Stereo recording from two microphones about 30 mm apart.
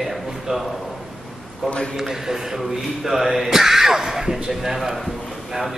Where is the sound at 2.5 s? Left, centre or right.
Centre.